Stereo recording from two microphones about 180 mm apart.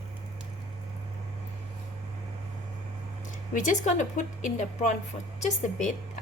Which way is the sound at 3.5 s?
45° left (ahead or behind).